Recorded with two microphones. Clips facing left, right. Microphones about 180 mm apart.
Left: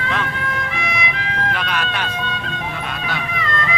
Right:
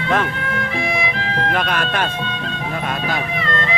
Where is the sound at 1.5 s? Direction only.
45° right (ahead or behind).